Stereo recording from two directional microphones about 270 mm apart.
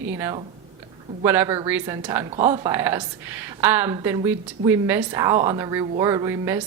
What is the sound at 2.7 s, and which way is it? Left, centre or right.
A woman's voice, centre.